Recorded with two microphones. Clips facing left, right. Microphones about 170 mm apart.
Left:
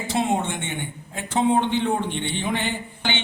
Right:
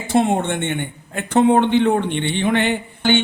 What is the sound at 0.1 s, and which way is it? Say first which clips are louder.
A man's voice: right 6 dB; 55° right (ahead or behind).